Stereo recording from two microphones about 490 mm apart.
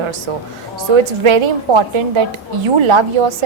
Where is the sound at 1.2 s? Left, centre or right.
Right.